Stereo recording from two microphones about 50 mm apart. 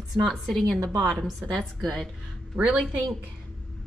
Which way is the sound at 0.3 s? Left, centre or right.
Centre.